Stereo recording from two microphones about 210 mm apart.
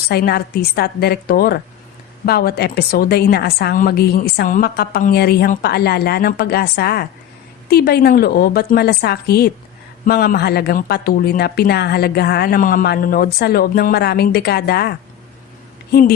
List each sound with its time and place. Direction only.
0.1 s speech: 50° left (ahead or behind)